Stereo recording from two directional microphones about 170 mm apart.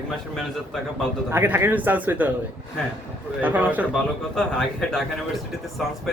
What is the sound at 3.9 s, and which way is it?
Speech, 5° left (ahead or behind).